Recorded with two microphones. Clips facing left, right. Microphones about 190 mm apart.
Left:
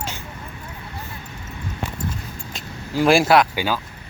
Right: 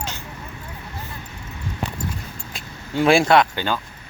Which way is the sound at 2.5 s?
Centre (ahead or behind).